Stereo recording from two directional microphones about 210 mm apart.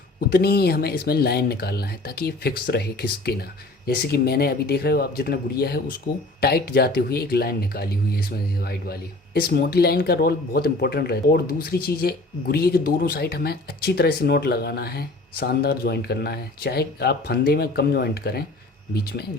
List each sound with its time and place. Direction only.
0.3 s speech: 50° left (ahead or behind)